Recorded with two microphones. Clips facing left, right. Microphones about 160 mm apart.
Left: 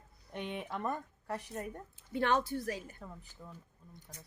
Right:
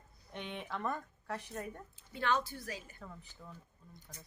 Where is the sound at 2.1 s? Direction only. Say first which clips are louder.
Left 4 dB; 60° left (ahead or behind).